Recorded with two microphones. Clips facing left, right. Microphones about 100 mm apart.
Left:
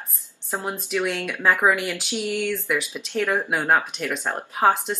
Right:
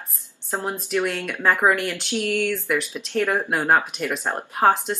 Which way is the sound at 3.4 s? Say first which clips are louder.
Right 1 dB; centre (ahead or behind).